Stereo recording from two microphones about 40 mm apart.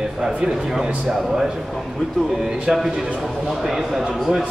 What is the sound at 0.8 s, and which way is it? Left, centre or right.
Speech, right.